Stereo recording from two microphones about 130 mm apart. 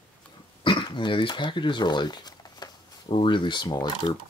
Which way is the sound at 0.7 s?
40° left (ahead or behind).